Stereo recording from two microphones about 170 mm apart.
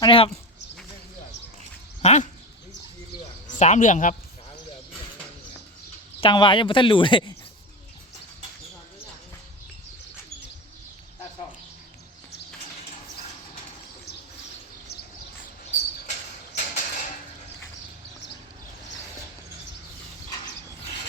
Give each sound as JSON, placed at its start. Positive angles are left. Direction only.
{"t": 0.0, "sound": "speech", "side_deg": 30}
{"t": 2.0, "sound": "dog", "side_deg": 40}
{"t": 3.4, "sound": "speech", "side_deg": 45}
{"t": 6.1, "sound": "speech", "side_deg": 30}
{"t": 16.6, "sound": "a sound", "side_deg": 45}